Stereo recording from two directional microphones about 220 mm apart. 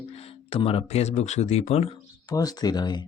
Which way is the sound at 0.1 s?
25° left (ahead or behind).